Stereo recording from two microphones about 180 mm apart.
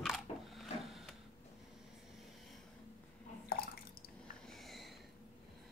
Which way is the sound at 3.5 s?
55° left (ahead or behind).